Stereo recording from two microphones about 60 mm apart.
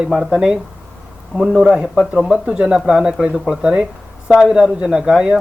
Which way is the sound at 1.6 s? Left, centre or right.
Centre.